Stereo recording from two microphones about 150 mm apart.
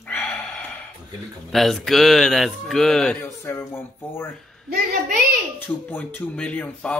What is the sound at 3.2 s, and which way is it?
Speech, 15° left (ahead or behind).